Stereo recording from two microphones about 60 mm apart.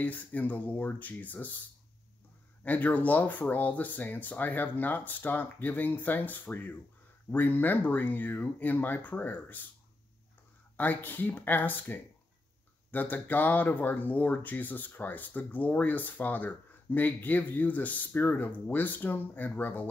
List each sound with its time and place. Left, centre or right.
0.0 s speech: left
2.6 s speech: left
10.8 s speech: left